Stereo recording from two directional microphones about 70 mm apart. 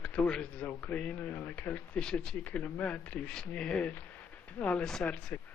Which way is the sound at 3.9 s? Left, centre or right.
Left.